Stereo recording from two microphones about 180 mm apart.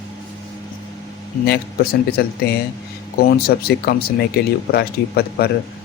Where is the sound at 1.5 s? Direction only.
60° left (ahead or behind).